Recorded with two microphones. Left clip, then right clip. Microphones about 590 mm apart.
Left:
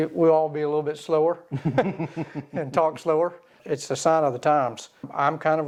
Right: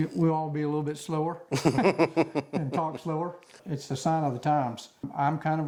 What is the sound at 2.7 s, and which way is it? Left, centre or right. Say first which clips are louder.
Speech: left 11 dB; left.